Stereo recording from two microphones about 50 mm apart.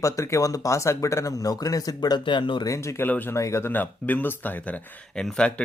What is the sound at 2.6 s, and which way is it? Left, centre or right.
Speech, left.